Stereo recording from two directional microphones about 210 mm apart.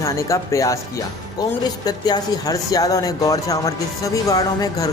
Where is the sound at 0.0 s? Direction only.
15° left (ahead or behind).